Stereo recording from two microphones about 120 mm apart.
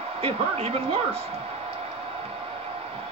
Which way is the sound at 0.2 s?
55° right (ahead or behind).